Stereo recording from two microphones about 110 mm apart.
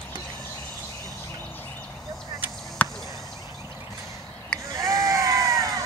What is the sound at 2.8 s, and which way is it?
Chop, 15° left (ahead or behind).